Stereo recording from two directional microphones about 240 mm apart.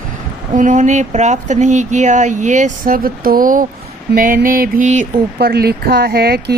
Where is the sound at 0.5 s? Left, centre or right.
Right.